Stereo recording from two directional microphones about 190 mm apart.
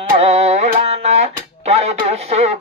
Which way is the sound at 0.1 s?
35° right (ahead or behind).